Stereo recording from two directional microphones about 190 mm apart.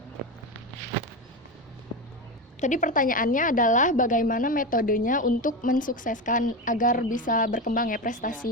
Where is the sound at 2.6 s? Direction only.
40° left (ahead or behind).